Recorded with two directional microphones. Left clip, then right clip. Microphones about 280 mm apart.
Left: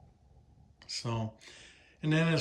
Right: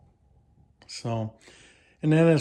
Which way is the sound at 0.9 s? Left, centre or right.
Centre.